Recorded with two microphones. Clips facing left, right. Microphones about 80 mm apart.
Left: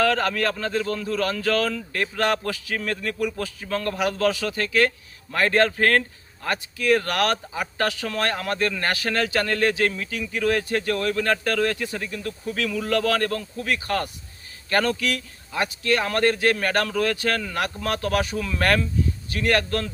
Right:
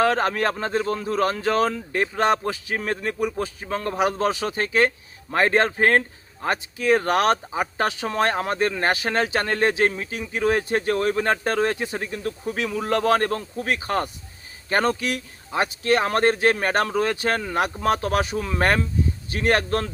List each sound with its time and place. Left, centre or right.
0.0 s a man's voice: right